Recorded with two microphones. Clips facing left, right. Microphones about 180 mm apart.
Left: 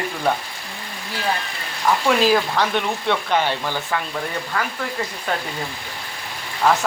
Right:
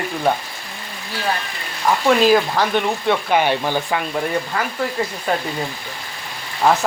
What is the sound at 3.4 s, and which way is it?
Speech, 15° right (ahead or behind).